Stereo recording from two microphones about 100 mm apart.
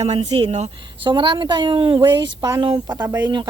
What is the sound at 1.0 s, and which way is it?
A woman's voice, 55° right (ahead or behind).